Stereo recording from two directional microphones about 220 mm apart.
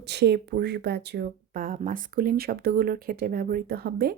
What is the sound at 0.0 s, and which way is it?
Speech, 50° right (ahead or behind).